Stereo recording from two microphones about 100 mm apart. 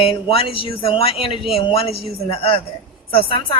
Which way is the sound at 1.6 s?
70° left (ahead or behind).